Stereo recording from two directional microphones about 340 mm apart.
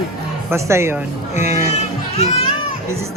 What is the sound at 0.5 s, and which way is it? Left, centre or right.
Speech, centre.